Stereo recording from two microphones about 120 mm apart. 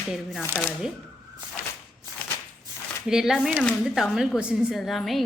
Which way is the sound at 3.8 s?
5° right (ahead or behind).